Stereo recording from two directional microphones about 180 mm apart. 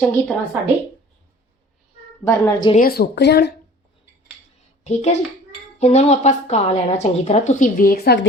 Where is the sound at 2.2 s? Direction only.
20° left (ahead or behind).